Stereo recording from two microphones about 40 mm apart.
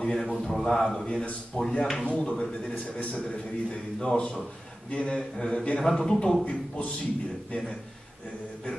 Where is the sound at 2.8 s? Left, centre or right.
Left.